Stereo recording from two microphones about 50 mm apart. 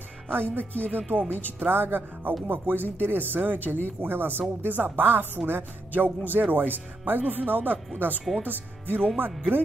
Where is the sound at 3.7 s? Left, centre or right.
Centre.